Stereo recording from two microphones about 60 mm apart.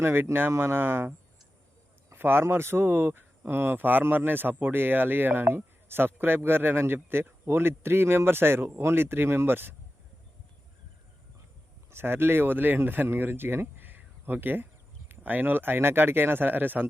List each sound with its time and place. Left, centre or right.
0.0 s speech: right
2.1 s speech: right
11.9 s speech: right